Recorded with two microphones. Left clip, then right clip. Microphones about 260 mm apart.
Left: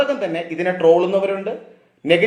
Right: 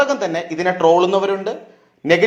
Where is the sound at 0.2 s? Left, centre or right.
Right.